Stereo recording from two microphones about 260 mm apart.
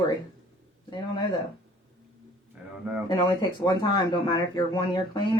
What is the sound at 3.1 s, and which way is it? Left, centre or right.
Speech, centre.